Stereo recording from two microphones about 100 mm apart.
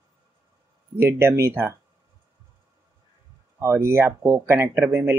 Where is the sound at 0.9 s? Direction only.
25° right (ahead or behind).